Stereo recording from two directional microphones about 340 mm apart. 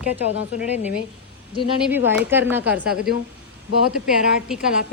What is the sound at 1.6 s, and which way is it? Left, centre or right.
Speech, centre.